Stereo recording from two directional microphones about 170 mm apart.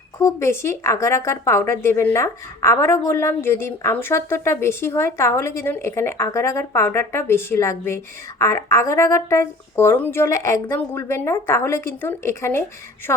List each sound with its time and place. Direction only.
0.2 s speech: 15° left (ahead or behind)